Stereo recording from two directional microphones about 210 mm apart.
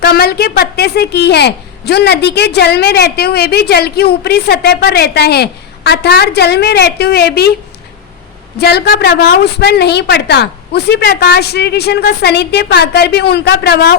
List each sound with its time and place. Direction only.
0.0 s a child's voice: 50° left (ahead or behind)
8.5 s a child's voice: 50° left (ahead or behind)